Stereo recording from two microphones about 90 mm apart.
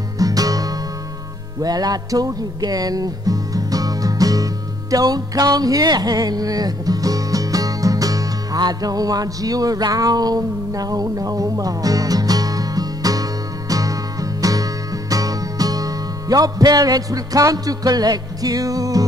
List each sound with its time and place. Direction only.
0.2 s music: 40° right (ahead or behind)